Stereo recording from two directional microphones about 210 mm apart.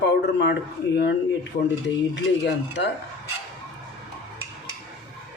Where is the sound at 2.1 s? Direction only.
55° left (ahead or behind).